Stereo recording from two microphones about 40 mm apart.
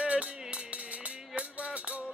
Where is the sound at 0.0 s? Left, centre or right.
Right.